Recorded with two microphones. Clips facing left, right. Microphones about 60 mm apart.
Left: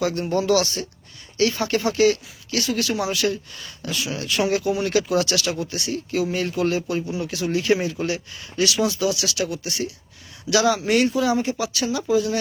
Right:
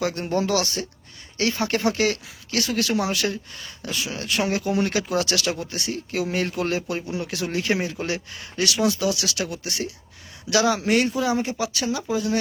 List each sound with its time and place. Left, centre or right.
0.0 s speech: right